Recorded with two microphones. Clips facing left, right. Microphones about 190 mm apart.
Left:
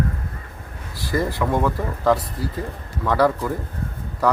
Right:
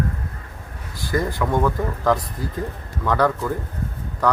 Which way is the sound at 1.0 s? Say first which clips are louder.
Even; centre (ahead or behind).